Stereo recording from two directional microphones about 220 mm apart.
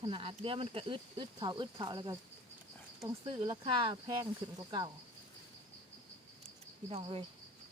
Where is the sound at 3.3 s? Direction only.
20° right (ahead or behind).